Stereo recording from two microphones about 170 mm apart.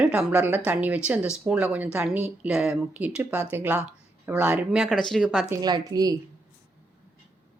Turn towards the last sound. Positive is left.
turn(degrees=-20)  # may be behind; listen again after turning